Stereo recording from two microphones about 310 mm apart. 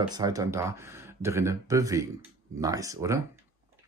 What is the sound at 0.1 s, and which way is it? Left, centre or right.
Speech, centre.